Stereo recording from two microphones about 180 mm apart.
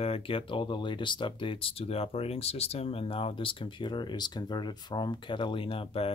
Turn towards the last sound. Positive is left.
turn(degrees=30)  # may be behind; listen again after turning